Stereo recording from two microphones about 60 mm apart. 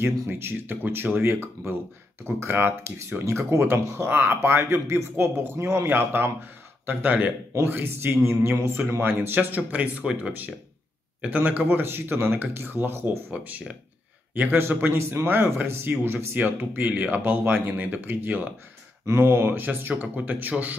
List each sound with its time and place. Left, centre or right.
0.0 s speech: right
5.1 s speech: right
13.3 s a man's voice: right
19.0 s speech: right